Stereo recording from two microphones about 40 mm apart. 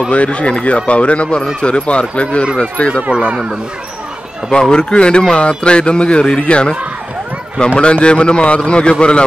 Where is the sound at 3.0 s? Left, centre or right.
Right.